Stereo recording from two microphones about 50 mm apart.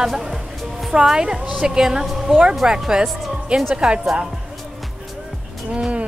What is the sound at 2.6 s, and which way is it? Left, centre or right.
Music, centre.